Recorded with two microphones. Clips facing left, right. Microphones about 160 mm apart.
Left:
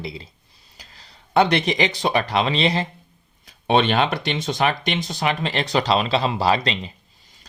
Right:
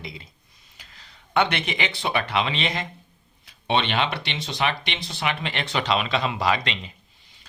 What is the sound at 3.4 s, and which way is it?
Speech, 45° left (ahead or behind).